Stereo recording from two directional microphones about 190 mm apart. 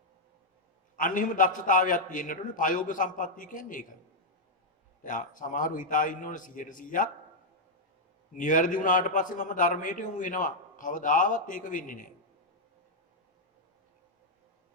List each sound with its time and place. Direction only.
0.9 s a man's voice: 45° left (ahead or behind)
5.0 s a man's voice: 45° left (ahead or behind)
8.4 s a man's voice: 45° left (ahead or behind)